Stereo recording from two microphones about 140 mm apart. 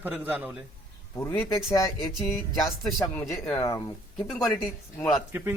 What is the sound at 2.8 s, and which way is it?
Speech, 20° left (ahead or behind).